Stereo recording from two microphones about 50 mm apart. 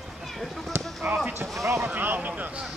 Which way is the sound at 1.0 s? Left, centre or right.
Right.